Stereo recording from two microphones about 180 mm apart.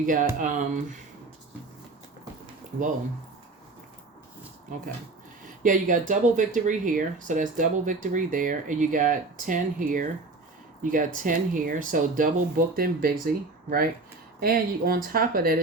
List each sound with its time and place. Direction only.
0.0 s speech: 50° right (ahead or behind)
5.6 s speech: 45° right (ahead or behind)
11.2 s speech: 50° right (ahead or behind)